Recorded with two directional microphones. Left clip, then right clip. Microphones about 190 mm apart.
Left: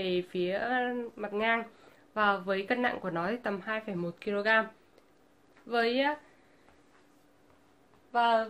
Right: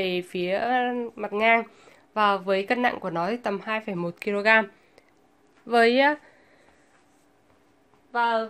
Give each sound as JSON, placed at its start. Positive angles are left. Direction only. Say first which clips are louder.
{"t": 0.0, "sound": "speech", "louder": "right 4 dB", "side_deg": -30}
{"t": 8.1, "sound": "speech", "louder": "right 2 dB", "side_deg": -20}